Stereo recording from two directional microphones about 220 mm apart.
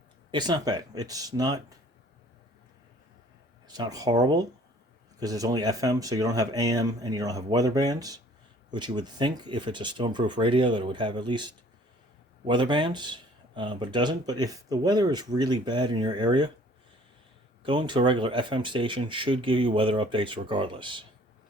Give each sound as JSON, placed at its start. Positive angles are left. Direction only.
{"t": 0.3, "sound": "speech", "side_deg": -20}
{"t": 3.7, "sound": "speech", "side_deg": -15}
{"t": 17.6, "sound": "speech", "side_deg": -20}